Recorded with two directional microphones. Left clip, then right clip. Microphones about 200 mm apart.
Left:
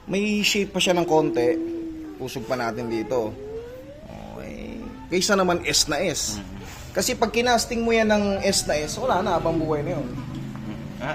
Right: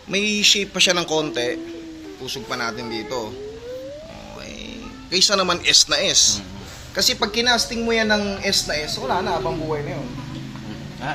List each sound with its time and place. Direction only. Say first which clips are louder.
0.5 s speech: right 4 dB; 35° left (ahead or behind)
5.1 s speech: right 3 dB; 45° left (ahead or behind)